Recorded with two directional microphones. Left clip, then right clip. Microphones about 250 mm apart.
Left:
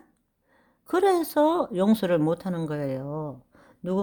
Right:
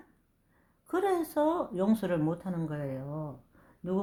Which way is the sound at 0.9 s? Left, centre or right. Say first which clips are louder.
Left 7 dB; left.